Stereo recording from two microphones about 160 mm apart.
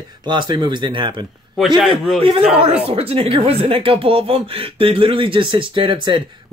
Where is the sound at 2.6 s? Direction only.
40° right (ahead or behind).